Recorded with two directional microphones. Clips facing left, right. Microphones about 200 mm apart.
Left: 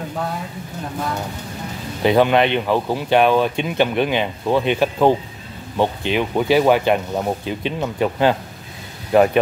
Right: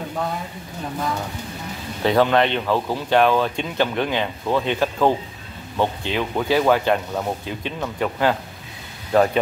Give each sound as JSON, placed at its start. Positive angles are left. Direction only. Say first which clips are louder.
{"t": 2.0, "sound": "speech", "louder": "left 2 dB", "side_deg": 15}